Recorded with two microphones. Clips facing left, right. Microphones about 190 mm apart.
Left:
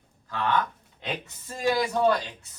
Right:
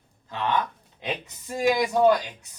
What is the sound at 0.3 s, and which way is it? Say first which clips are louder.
Speech: even; 20° right (ahead or behind).